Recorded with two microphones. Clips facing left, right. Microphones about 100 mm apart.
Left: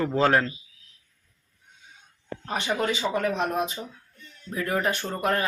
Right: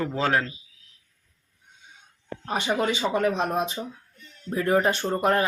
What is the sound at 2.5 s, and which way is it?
Speech, 20° right (ahead or behind).